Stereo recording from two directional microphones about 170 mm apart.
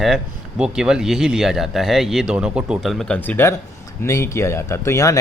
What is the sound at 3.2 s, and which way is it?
Speech, 10° left (ahead or behind).